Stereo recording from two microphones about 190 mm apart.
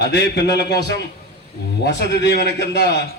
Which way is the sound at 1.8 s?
60° left (ahead or behind).